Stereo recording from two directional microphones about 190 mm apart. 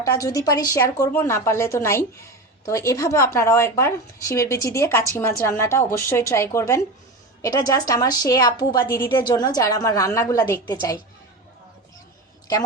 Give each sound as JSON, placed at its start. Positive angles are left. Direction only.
{"t": 0.0, "sound": "a woman's voice", "side_deg": 15}